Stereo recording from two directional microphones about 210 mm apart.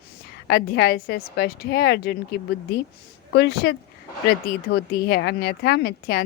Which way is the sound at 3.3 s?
50° left (ahead or behind).